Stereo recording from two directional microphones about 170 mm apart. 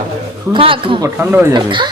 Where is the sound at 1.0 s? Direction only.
15° right (ahead or behind).